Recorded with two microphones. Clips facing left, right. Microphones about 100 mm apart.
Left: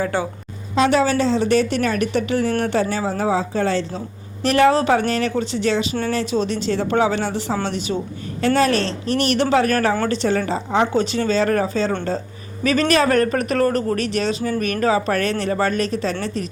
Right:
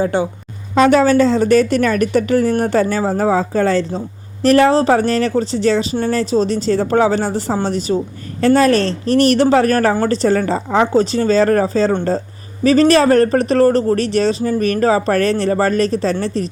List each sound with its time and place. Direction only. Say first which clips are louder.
0.0 s a woman's voice: right 5 dB; 20° right (ahead or behind)
0.8 s a woman's voice: right 6 dB; 50° right (ahead or behind)